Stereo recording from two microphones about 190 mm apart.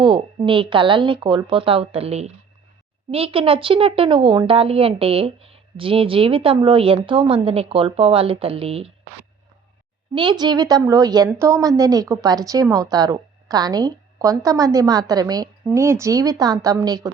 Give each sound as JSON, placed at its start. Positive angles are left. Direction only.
{"t": 0.0, "sound": "a woman's voice", "side_deg": -25}
{"t": 10.2, "sound": "a woman's voice", "side_deg": -25}